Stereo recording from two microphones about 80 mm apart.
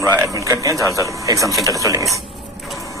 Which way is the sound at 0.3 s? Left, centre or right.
Right.